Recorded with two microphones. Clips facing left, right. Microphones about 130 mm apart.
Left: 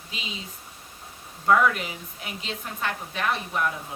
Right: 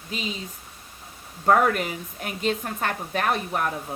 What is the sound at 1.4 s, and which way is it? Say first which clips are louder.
A woman's voice: right 2 dB; 45° right (ahead or behind).